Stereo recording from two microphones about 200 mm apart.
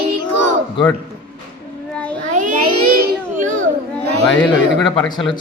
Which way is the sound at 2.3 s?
40° right (ahead or behind).